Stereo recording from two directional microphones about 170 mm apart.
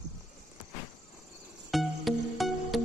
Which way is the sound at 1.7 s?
Centre (ahead or behind).